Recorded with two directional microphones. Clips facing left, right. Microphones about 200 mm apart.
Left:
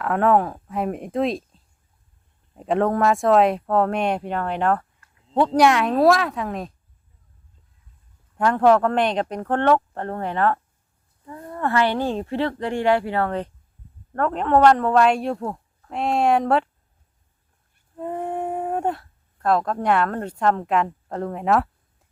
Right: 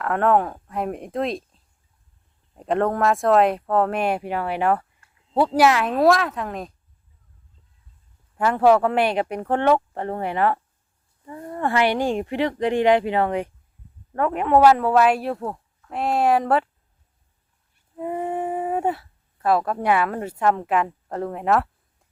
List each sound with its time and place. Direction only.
0.0 s speech: centre (ahead or behind)
8.4 s speech: 5° right (ahead or behind)
17.9 s speech: 5° right (ahead or behind)